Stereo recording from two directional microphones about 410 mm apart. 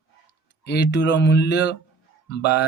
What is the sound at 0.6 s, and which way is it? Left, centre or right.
Speech, left.